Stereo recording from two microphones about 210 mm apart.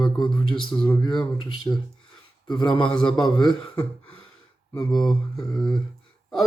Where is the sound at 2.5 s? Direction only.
20° left (ahead or behind).